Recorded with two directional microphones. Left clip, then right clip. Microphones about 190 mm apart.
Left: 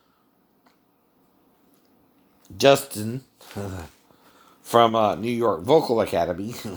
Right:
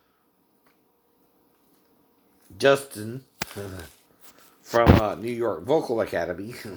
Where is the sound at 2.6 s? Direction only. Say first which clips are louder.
Left 3 dB; 45° left (ahead or behind).